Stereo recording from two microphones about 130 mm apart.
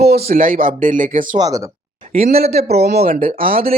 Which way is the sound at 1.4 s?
25° right (ahead or behind).